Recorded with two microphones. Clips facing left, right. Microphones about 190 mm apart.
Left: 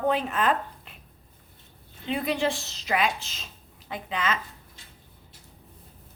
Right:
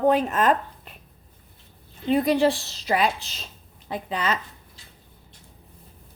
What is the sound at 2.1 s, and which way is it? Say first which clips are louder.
A woman's voice: right 7 dB; 40° right (ahead or behind).